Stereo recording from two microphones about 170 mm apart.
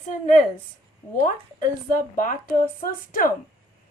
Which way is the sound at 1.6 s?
50° left (ahead or behind).